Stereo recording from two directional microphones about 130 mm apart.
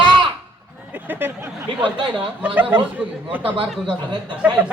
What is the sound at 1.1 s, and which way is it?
Speech, 15° right (ahead or behind).